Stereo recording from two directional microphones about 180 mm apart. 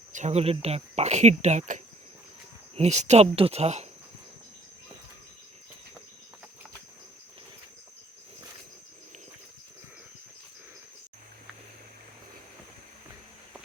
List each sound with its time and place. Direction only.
0.1 s speech: 40° right (ahead or behind)